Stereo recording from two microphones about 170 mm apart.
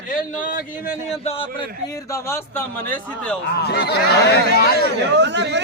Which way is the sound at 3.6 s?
70° left (ahead or behind).